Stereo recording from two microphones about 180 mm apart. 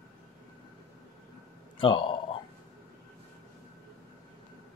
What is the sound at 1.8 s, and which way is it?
Speech, 30° left (ahead or behind).